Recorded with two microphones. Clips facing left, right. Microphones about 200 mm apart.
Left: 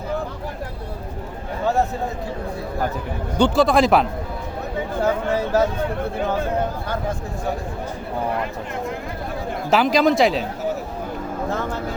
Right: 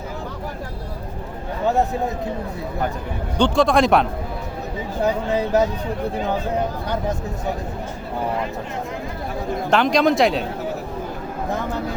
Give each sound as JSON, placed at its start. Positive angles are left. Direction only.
{"t": 3.3, "sound": "speech", "side_deg": 5}
{"t": 5.0, "sound": "speech", "side_deg": -15}
{"t": 9.6, "sound": "speech", "side_deg": 5}